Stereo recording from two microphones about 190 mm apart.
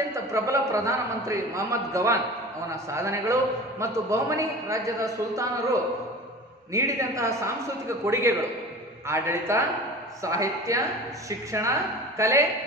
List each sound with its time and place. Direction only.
0.1 s a man's voice: 15° right (ahead or behind)